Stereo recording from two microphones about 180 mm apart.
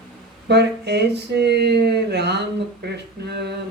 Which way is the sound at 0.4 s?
70° right (ahead or behind).